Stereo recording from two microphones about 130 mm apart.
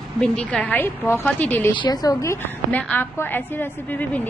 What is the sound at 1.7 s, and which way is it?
A woman's voice, 35° left (ahead or behind).